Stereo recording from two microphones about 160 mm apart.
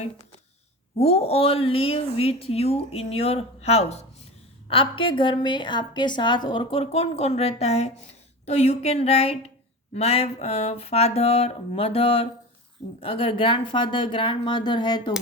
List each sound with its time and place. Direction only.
0.9 s a woman's voice: 40° left (ahead or behind)